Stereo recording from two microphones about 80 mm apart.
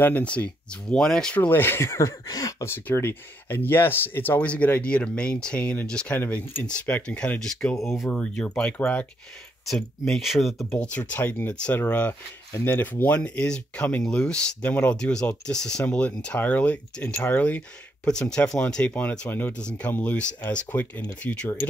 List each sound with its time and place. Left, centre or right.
0.0 s speech: centre
1.4 s speech: left
2.2 s speech: left
2.6 s speech: left; by 6.1 s centre
6.1 s speech: left
6.6 s speech: centre
9.7 s speech: centre
10.8 s speech: centre
11.8 s speech: left